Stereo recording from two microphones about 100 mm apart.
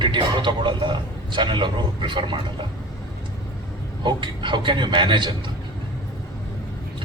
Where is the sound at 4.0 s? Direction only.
50° right (ahead or behind).